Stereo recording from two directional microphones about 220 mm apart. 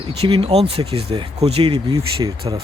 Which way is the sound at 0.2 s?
25° right (ahead or behind).